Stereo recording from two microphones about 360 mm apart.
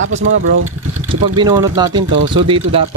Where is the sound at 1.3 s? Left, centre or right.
Centre.